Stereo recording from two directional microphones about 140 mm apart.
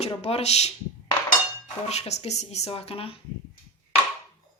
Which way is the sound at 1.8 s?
50° left (ahead or behind).